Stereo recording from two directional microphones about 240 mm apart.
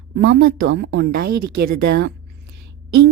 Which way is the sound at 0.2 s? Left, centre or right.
Right.